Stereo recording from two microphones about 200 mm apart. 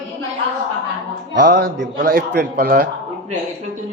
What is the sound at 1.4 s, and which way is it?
A man's voice, 45° right (ahead or behind).